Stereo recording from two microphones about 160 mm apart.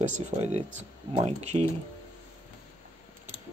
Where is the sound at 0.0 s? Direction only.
50° right (ahead or behind).